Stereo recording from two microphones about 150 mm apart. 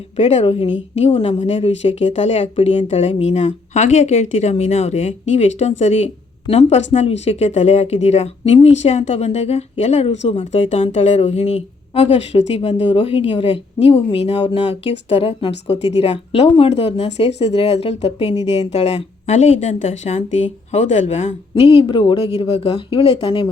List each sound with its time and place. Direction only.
0.2 s speech: 45° left (ahead or behind)
21.6 s speech: 40° left (ahead or behind)